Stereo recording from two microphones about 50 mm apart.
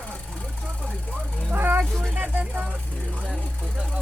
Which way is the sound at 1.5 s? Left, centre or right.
Right.